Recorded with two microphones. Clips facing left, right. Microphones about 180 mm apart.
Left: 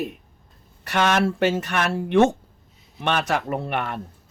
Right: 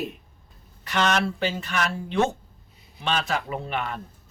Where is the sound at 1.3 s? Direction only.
75° left (ahead or behind).